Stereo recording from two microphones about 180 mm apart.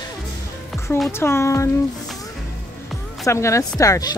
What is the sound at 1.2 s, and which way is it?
Speech, 15° left (ahead or behind).